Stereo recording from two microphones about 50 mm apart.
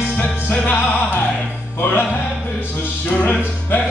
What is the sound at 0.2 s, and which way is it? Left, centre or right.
Music, left.